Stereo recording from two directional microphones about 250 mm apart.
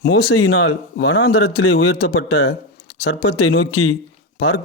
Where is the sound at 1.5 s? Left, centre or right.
Left.